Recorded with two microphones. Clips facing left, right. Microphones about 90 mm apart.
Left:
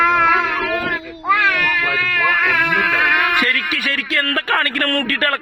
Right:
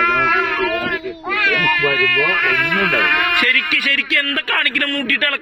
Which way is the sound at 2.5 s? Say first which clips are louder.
Even; 20° left (ahead or behind).